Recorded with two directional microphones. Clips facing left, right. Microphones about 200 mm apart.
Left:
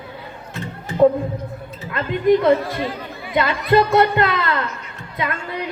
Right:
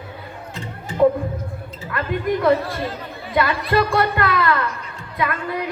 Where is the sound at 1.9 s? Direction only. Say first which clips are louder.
Left 6 dB; 20° left (ahead or behind).